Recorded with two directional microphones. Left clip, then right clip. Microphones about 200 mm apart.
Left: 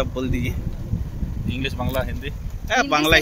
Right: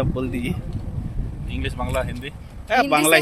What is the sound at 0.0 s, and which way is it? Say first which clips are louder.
Speech: even; 5° right (ahead or behind).